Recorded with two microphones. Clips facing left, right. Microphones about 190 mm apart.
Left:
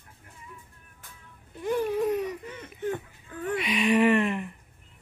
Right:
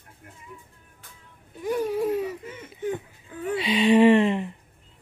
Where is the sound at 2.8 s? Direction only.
15° right (ahead or behind).